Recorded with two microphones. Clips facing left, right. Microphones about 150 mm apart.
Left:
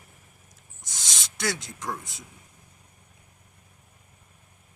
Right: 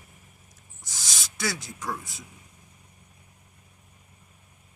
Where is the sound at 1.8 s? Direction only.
20° left (ahead or behind).